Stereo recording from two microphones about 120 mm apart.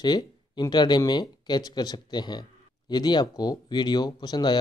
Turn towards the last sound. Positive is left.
turn(degrees=35)  # may be behind; listen again after turning